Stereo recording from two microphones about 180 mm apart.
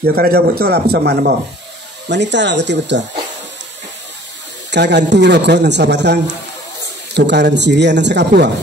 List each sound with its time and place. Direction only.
0.0 s a man's voice: 60° right (ahead or behind)
2.0 s a man's voice: 75° right (ahead or behind)
4.6 s a man's voice: 75° right (ahead or behind)